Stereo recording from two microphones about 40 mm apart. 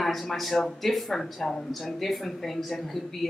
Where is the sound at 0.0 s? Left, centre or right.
Centre.